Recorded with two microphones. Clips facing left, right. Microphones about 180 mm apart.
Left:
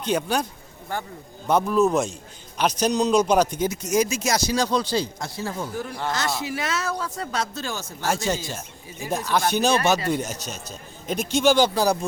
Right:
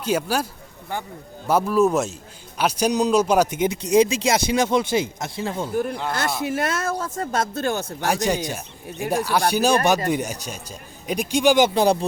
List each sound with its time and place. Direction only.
0.0 s speech: 5° right (ahead or behind)
1.5 s speech: 5° right (ahead or behind)
3.6 s speech: 25° right (ahead or behind)
5.7 s speech: 55° right (ahead or behind)
8.1 s speech: 15° right (ahead or behind)